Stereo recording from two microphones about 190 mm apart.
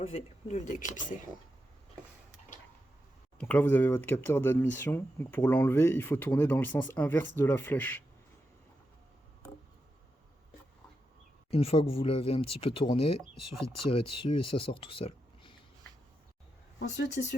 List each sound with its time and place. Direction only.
0.0 s speech: 30° left (ahead or behind)
3.3 s speech: 10° left (ahead or behind)
11.5 s speech: 30° left (ahead or behind)
17.2 s speech: 55° left (ahead or behind)